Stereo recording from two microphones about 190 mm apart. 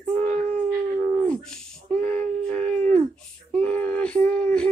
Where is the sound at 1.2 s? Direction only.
5° left (ahead or behind).